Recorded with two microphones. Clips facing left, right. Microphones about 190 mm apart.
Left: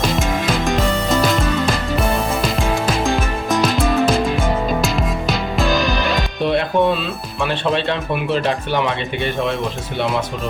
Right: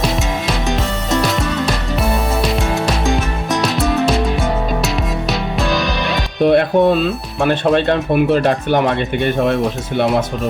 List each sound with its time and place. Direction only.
0.0 s music: centre (ahead or behind)
3.5 s music: centre (ahead or behind)
6.4 s speech: 50° right (ahead or behind)